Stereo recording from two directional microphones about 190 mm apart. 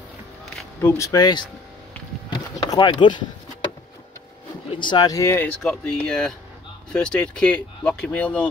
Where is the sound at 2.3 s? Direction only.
25° left (ahead or behind).